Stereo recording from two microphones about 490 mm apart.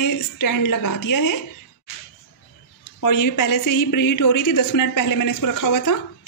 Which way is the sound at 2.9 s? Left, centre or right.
Left.